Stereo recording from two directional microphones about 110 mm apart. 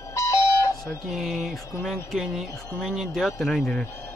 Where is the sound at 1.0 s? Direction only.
Centre (ahead or behind).